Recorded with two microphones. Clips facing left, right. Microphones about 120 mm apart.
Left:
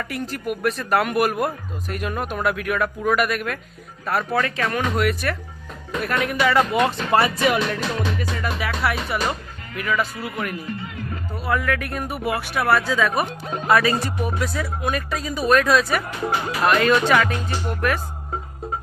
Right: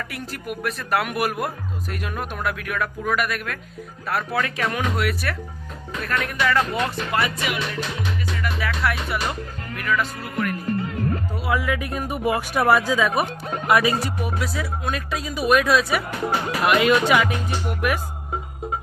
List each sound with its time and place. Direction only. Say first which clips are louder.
0.1 s speech: left 5 dB; centre (ahead or behind)
6.0 s speech: left 3 dB; 10° left (ahead or behind)
6.7 s speech: left 5 dB; 30° left (ahead or behind)
8.6 s music: even; 5° left (ahead or behind)
9.7 s speech: left 1 dB; 5° left (ahead or behind)
10.7 s music: right 6 dB; 45° right (ahead or behind)
11.4 s speech: left 1 dB; 10° right (ahead or behind)